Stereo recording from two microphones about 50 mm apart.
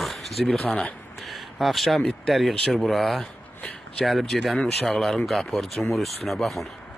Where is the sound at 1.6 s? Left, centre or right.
Centre.